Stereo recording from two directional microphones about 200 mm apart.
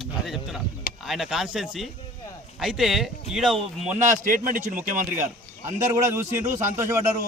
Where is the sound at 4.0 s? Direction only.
40° right (ahead or behind).